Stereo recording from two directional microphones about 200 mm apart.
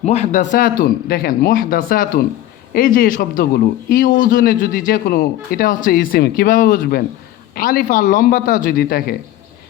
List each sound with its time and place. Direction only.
0.0 s speech: 35° left (ahead or behind)